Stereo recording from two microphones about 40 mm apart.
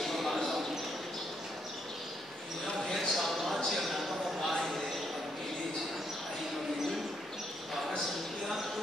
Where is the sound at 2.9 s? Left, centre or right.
Centre.